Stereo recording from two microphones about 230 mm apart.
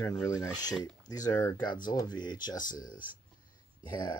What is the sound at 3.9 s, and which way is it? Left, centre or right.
Speech, centre.